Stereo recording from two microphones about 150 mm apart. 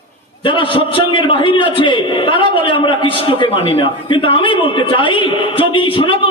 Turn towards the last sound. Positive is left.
turn(degrees=35)  # may be behind; listen again after turning